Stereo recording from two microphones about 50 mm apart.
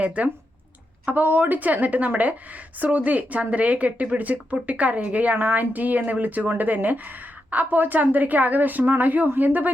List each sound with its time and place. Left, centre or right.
0.0 s speech: right